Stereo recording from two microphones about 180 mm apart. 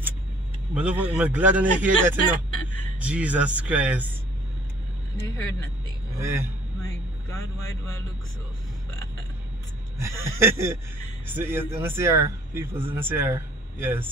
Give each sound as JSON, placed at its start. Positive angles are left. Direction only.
{"t": 0.7, "sound": "speech", "side_deg": -5}
{"t": 5.2, "sound": "speech", "side_deg": 15}
{"t": 6.1, "sound": "speech", "side_deg": -15}
{"t": 7.2, "sound": "speech", "side_deg": 15}
{"t": 9.9, "sound": "speech", "side_deg": -15}